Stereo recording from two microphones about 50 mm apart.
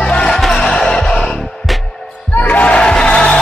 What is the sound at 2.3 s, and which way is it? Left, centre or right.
Crowd, left.